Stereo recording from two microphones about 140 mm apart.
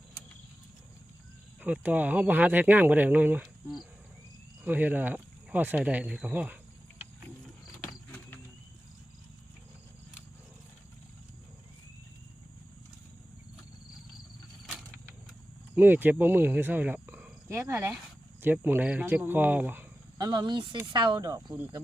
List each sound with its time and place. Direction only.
1.6 s speech: 10° right (ahead or behind)
15.7 s speech: 15° right (ahead or behind)
20.1 s speech: 30° right (ahead or behind)